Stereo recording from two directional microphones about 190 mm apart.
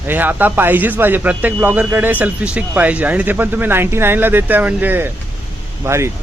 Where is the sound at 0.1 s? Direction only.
10° right (ahead or behind).